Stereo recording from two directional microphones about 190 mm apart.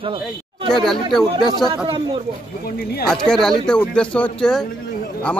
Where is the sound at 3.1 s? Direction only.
Centre (ahead or behind).